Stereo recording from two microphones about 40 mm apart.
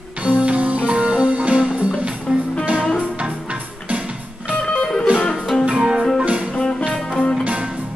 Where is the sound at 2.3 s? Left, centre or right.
Centre.